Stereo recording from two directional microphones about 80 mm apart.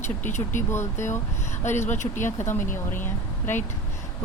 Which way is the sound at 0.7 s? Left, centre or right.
Left.